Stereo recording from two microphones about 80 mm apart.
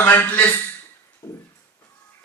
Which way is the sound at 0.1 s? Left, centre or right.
Left.